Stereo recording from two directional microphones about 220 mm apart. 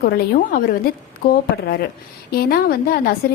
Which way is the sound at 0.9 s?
45° left (ahead or behind).